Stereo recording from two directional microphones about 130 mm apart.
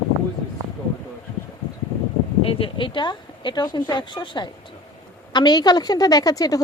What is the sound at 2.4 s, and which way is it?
A woman's voice, 45° left (ahead or behind).